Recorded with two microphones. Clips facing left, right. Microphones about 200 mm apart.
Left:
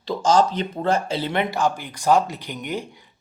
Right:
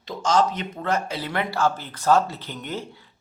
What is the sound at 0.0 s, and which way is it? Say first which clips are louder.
Speech: left 3 dB; 30° left (ahead or behind).